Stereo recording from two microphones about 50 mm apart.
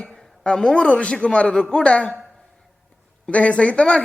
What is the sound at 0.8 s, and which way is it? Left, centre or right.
Speech, left.